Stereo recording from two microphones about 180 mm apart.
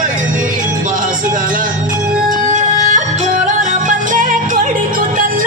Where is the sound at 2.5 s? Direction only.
40° right (ahead or behind).